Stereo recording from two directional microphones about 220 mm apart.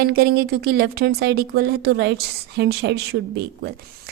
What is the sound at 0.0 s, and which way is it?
Speech, 45° right (ahead or behind).